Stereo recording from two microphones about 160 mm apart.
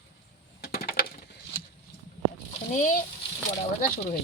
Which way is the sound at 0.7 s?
65° left (ahead or behind).